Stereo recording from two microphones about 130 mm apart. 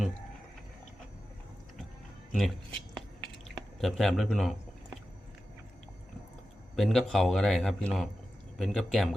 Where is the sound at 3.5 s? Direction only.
Centre (ahead or behind).